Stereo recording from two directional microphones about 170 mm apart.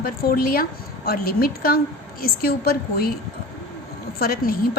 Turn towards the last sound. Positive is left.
turn(degrees=65)  # may be behind; listen again after turning